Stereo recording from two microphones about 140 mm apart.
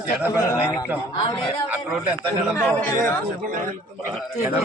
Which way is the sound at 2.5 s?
10° left (ahead or behind).